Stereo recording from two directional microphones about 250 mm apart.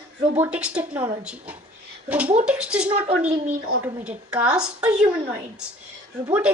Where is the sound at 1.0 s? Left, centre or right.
Right.